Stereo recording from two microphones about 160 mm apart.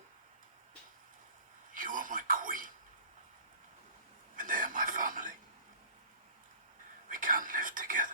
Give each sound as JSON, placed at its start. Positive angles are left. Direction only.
{"t": 1.7, "sound": "a sound", "side_deg": -55}
{"t": 4.4, "sound": "whispering", "side_deg": -55}
{"t": 7.1, "sound": "whispering", "side_deg": -55}